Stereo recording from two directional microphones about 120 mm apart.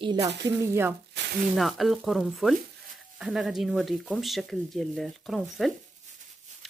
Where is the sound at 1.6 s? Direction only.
Centre (ahead or behind).